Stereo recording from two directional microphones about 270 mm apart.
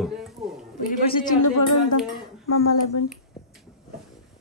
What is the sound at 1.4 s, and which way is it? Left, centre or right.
Speech, left.